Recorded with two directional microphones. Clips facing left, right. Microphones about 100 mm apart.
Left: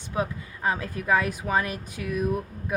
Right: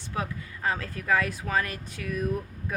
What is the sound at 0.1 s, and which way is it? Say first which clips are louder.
Speech: left 4 dB; 20° left (ahead or behind).